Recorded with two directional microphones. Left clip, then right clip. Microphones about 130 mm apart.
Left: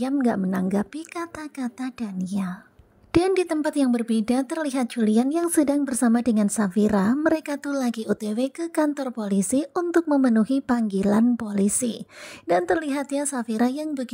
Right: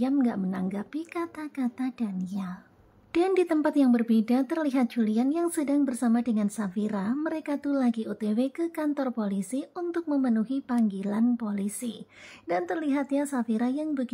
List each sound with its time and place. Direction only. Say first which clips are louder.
0.0 s speech: left 3 dB; 45° left (ahead or behind)
12.4 s speech: left 7 dB; 35° left (ahead or behind)